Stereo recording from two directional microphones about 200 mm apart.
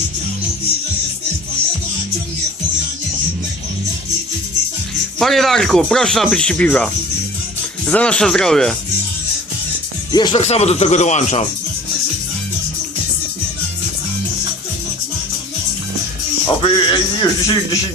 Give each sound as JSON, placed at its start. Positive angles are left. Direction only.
{"t": 5.2, "sound": "speech", "side_deg": 0}
{"t": 10.1, "sound": "speech", "side_deg": 20}
{"t": 10.4, "sound": "speech", "side_deg": 35}
{"t": 16.6, "sound": "speech", "side_deg": 25}